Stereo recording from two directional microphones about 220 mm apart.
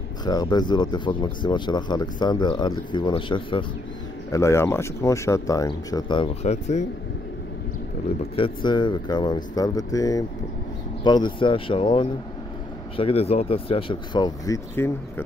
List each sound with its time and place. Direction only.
0.2 s speech: 20° left (ahead or behind)
8.4 s speech: 20° left (ahead or behind)